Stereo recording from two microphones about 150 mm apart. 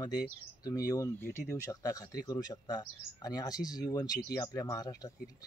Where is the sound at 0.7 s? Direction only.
25° left (ahead or behind).